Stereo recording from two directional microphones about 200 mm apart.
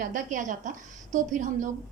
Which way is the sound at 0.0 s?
40° right (ahead or behind).